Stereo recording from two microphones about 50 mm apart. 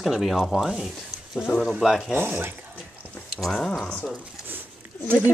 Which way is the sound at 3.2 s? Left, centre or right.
Centre.